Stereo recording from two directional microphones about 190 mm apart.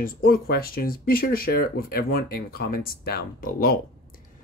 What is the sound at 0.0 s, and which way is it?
Speech, 50° left (ahead or behind).